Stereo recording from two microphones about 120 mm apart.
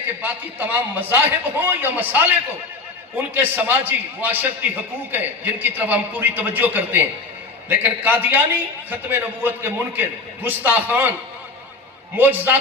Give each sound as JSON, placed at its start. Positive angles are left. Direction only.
{"t": 0.2, "sound": "a man's voice", "side_deg": -15}
{"t": 12.1, "sound": "a man's voice", "side_deg": -15}